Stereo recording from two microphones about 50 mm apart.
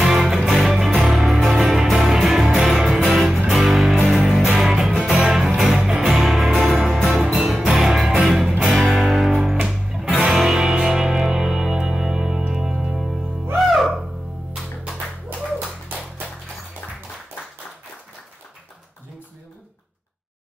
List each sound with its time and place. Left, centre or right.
0.0 s music: centre
9.4 s music: centre
9.7 s music: centre
16.8 s music: left